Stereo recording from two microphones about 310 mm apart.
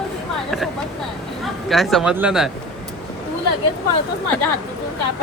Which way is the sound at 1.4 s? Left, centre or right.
Centre.